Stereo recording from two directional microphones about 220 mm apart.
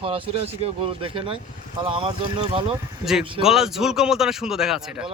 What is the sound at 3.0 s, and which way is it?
Speech, centre (ahead or behind).